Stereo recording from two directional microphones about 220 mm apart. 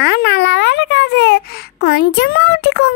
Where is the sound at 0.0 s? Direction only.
50° left (ahead or behind).